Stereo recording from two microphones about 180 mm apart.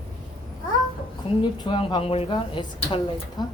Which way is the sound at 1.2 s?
30° left (ahead or behind).